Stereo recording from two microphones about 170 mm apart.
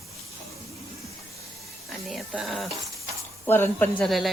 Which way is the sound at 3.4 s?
10° left (ahead or behind).